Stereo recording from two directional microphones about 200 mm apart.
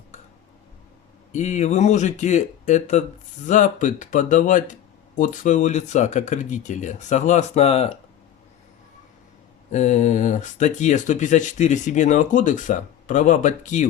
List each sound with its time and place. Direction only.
1.3 s speech: 35° left (ahead or behind)
9.7 s speech: 35° left (ahead or behind)